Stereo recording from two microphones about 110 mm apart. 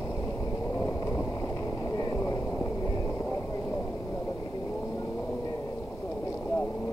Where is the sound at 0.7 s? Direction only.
30° left (ahead or behind).